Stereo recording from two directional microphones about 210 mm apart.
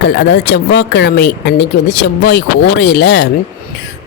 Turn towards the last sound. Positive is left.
turn(degrees=55)  # may be behind; listen again after turning